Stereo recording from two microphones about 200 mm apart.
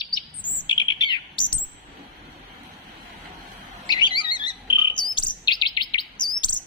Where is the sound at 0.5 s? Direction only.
25° left (ahead or behind).